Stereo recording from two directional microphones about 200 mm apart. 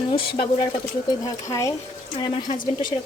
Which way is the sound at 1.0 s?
15° left (ahead or behind).